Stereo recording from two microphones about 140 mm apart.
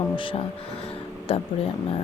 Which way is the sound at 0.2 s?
40° left (ahead or behind).